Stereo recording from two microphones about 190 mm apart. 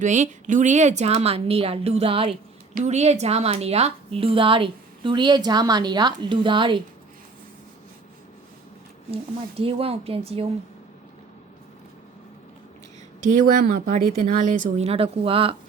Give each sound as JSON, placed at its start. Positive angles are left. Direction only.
{"t": 0.0, "sound": "a woman's voice", "side_deg": -40}
{"t": 9.6, "sound": "a woman's voice", "side_deg": -30}
{"t": 13.2, "sound": "a woman's voice", "side_deg": -45}